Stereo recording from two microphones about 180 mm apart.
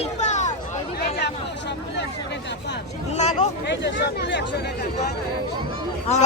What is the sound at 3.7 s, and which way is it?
Speech, 75° left (ahead or behind).